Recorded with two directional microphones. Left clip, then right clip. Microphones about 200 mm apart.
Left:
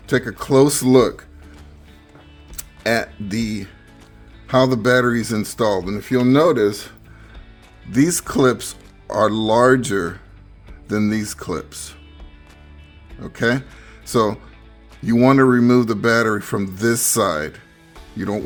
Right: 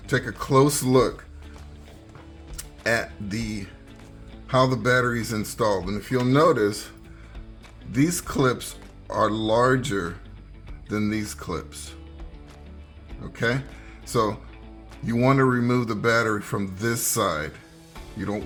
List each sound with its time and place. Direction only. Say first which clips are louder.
0.1 s speech: left 5 dB; 55° left (ahead or behind)
2.6 s speech: left 4 dB; 55° left (ahead or behind)
7.9 s speech: left 6 dB; 60° left (ahead or behind)
13.2 s speech: left 6 dB; 60° left (ahead or behind)